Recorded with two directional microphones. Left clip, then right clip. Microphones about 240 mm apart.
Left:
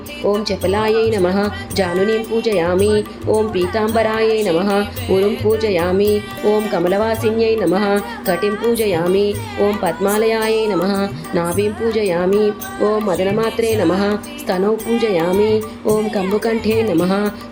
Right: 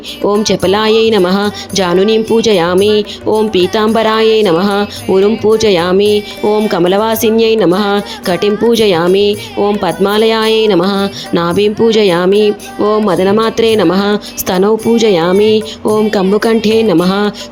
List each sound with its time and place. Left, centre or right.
0.3 s a woman's voice: right